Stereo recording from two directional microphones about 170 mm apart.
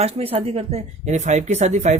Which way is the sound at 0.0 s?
35° right (ahead or behind).